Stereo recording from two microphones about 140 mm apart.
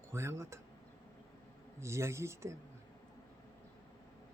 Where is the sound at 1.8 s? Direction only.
20° right (ahead or behind).